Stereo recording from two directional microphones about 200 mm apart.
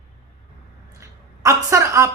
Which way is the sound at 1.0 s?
15° right (ahead or behind).